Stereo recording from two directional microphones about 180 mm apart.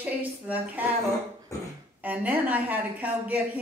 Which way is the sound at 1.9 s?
10° right (ahead or behind).